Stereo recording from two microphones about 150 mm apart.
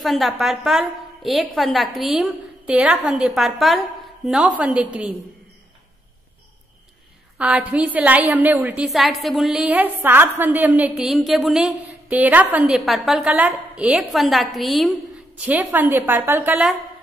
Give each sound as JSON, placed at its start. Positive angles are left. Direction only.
{"t": 0.0, "sound": "a woman's voice", "side_deg": 0}
{"t": 7.3, "sound": "a woman's voice", "side_deg": -10}